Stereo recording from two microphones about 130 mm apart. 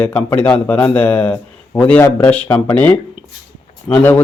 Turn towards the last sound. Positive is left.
turn(degrees=10)  # may be behind; listen again after turning